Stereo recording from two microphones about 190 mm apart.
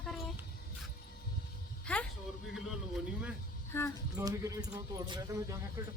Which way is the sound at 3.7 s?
10° left (ahead or behind).